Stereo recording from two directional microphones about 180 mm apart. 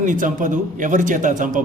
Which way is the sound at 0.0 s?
45° right (ahead or behind).